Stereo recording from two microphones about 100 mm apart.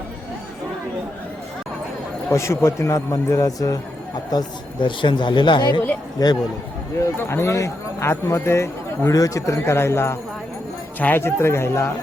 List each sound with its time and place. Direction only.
2.3 s a man's voice: 30° left (ahead or behind)
4.3 s speech: 50° left (ahead or behind)
6.2 s a man's voice: 40° left (ahead or behind)
7.2 s speech: 25° left (ahead or behind)